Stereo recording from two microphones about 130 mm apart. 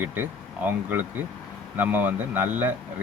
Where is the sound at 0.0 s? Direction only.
15° right (ahead or behind).